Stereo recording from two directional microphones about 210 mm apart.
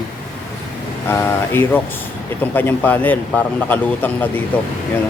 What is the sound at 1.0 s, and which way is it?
A man's voice, 10° left (ahead or behind).